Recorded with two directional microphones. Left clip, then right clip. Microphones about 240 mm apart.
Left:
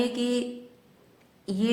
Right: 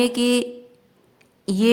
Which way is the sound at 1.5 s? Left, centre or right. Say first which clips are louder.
Right 9 dB; right.